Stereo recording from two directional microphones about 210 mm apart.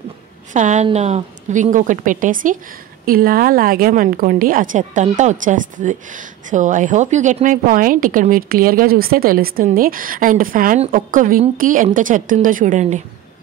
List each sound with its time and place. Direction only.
0.5 s a woman's voice: 35° right (ahead or behind)